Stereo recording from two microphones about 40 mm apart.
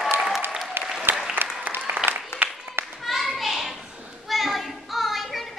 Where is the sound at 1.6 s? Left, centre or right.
Right.